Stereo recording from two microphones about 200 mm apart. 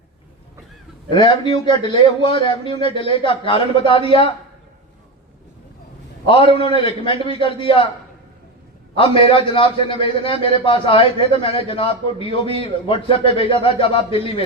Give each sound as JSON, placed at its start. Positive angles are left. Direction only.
{"t": 1.1, "sound": "a man's voice", "side_deg": 25}
{"t": 6.2, "sound": "a man's voice", "side_deg": 25}
{"t": 9.0, "sound": "a man's voice", "side_deg": 25}